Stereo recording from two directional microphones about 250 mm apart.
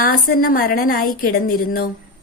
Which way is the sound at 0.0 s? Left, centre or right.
Left.